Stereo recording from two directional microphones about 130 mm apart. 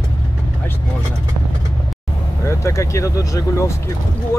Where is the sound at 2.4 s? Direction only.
20° left (ahead or behind).